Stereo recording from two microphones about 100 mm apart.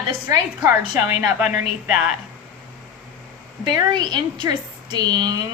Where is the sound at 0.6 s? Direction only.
25° right (ahead or behind).